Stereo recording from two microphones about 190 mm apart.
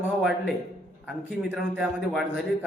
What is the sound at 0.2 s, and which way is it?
A man's voice, centre (ahead or behind).